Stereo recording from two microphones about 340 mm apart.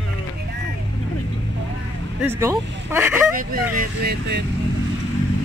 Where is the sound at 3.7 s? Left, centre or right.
Right.